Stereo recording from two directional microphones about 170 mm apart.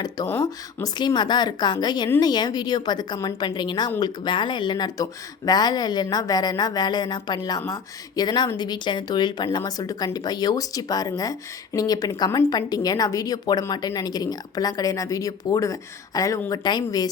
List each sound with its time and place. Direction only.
0.8 s speech: 25° left (ahead or behind)